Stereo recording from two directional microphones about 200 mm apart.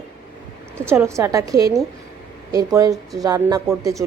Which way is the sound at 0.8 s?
15° right (ahead or behind).